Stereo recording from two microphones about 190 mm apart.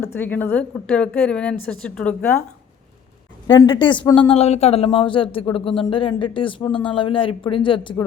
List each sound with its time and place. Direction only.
0.0 s a woman's voice: 10° left (ahead or behind)
3.4 s speech: 25° left (ahead or behind)